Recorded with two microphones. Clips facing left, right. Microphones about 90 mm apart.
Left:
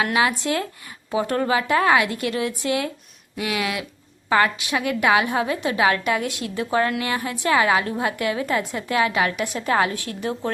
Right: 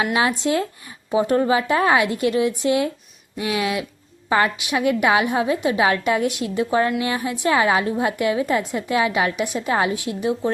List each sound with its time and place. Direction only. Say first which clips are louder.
0.1 s a woman's voice: right 1 dB; 25° right (ahead or behind)